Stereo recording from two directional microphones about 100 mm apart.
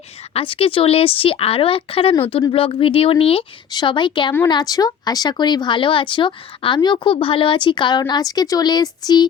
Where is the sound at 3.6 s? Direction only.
50° left (ahead or behind).